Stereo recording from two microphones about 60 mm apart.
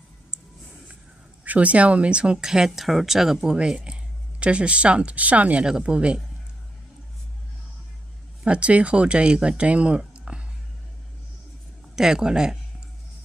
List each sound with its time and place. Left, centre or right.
1.4 s speech: right
8.5 s speech: centre
11.9 s speech: centre